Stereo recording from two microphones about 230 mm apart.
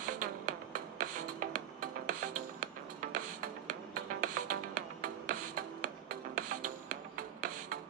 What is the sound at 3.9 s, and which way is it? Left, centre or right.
Music, right.